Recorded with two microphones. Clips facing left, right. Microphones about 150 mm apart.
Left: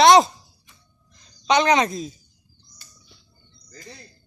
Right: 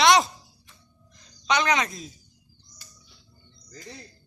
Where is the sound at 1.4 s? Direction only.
25° left (ahead or behind).